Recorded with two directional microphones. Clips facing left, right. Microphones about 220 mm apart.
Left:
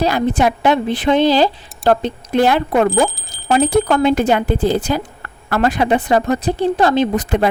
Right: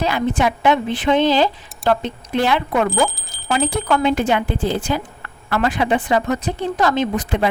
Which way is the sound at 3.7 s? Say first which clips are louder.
Left 5 dB; 40° left (ahead or behind).